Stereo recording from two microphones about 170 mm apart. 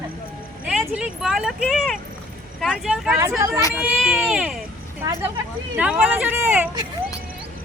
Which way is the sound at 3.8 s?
5° right (ahead or behind).